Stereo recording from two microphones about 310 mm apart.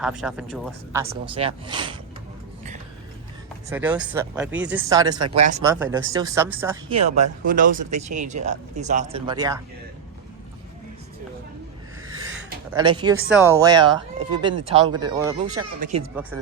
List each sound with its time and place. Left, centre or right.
0.0 s speech: centre
3.7 s speech: centre; by 5.7 s right
5.7 s speech: centre
7.0 s speech: right
12.7 s speech: centre
16.3 s speech: centre